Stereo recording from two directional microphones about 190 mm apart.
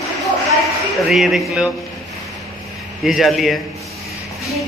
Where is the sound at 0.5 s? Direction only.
Centre (ahead or behind).